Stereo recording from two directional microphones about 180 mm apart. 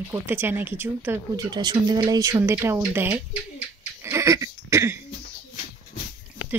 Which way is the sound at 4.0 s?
15° right (ahead or behind).